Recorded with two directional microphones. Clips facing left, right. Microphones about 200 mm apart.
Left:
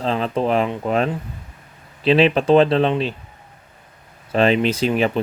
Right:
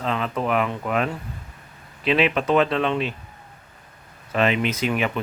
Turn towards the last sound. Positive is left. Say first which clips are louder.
# left 5 dB
turn(degrees=30)  # may be behind; listen again after turning